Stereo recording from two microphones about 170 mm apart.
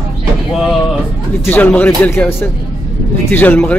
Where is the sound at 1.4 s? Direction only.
10° left (ahead or behind).